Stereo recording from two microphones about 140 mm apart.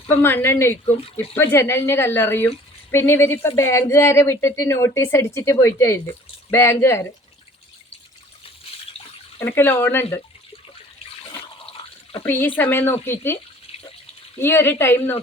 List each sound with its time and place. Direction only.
0.1 s speech: 15° left (ahead or behind)
0.9 s speech: 45° left (ahead or behind)
1.4 s speech: 20° left (ahead or behind)
9.4 s speech: 15° left (ahead or behind)
12.2 s speech: 15° left (ahead or behind)